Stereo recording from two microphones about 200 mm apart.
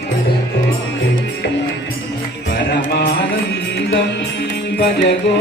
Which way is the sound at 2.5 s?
55° left (ahead or behind).